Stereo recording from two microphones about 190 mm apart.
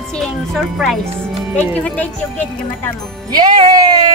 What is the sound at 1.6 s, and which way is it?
Speech, 10° left (ahead or behind).